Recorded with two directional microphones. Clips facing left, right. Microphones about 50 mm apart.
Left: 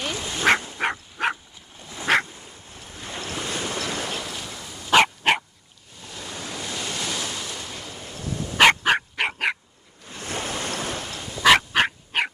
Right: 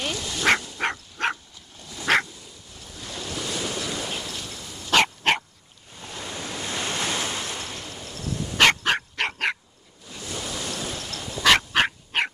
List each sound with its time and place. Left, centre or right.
0.1 s dog: left
0.7 s a sound: centre
1.8 s dog: left
2.2 s duck: left
2.9 s waves: left
3.7 s train: left
4.3 s a sound: centre
4.6 s dog: centre
5.9 s waves: right
7.7 s dog: centre
10.0 s waves: left
11.4 s dog: centre